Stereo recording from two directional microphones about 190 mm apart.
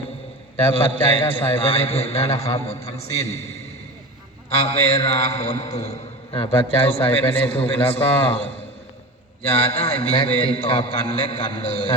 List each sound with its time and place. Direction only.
0.7 s a man's voice: 30° left (ahead or behind)
4.5 s a man's voice: 35° left (ahead or behind)
9.9 s a man's voice: 5° left (ahead or behind)
10.4 s a man's voice: 30° left (ahead or behind)